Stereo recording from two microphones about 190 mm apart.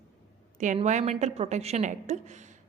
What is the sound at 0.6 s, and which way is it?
A woman's voice, 40° right (ahead or behind).